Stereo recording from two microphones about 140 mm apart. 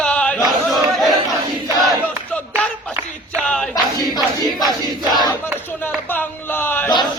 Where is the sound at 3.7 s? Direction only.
30° left (ahead or behind).